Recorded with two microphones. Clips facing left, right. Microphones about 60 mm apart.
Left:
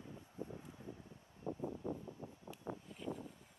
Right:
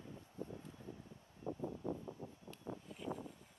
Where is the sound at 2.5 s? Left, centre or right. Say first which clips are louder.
Left 2 dB; left.